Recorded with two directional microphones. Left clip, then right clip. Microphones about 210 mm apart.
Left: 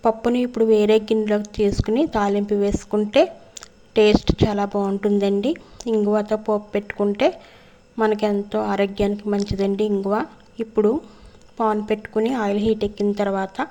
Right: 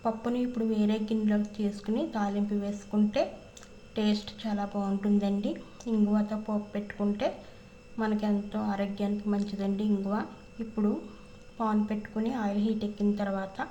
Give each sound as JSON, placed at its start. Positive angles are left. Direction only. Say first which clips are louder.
{"t": 0.0, "sound": "speech", "louder": "left 11 dB", "side_deg": 35}